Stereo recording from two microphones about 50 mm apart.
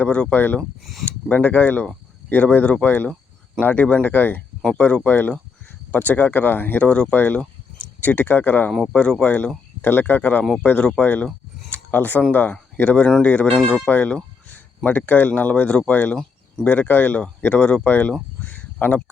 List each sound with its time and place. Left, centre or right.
0.3 s speech: left
2.8 s speech: left
4.8 s speech: left
5.0 s speech: left
6.8 s speech: left
7.1 s speech: left
8.9 s speech: left
9.2 s speech: left
13.6 s speech: centre
13.8 s speech: left
15.9 s speech: left
17.4 s speech: left
17.8 s speech: left
18.4 s a sound: left